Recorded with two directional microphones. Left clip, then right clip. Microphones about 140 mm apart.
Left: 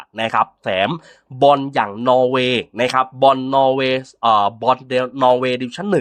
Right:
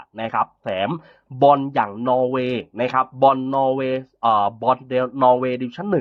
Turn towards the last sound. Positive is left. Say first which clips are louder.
# left 3 dB
turn(degrees=20)  # may be behind; listen again after turning